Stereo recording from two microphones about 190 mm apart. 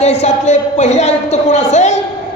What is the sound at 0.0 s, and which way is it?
A man's voice, 35° left (ahead or behind).